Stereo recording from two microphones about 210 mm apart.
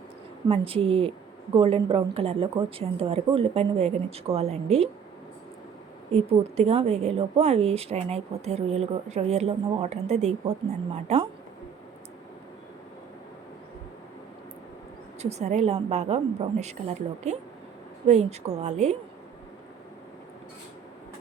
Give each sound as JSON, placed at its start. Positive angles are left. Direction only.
{"t": 0.4, "sound": "speech", "side_deg": -25}
{"t": 6.6, "sound": "a woman's voice", "side_deg": -30}
{"t": 15.2, "sound": "a woman's voice", "side_deg": -30}